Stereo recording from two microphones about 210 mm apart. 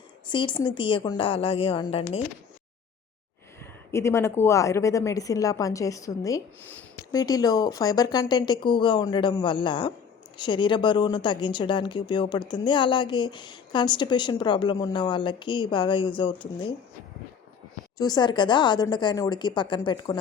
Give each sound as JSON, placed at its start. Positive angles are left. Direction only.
{"t": 0.3, "sound": "speech", "side_deg": 20}
{"t": 3.9, "sound": "a woman's voice", "side_deg": 10}
{"t": 17.9, "sound": "speech", "side_deg": 20}